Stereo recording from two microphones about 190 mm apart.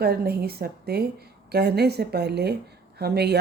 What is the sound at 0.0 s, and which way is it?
A woman's voice, 55° right (ahead or behind).